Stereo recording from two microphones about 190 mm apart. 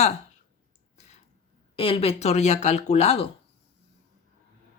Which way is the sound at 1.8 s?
30° left (ahead or behind).